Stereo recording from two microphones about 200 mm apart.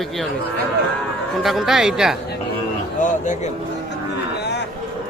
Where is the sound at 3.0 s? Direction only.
35° left (ahead or behind).